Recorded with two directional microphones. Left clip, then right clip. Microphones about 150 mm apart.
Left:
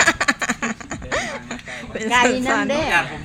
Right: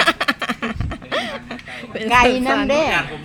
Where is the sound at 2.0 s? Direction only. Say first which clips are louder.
Right 3 dB; 60° right (ahead or behind).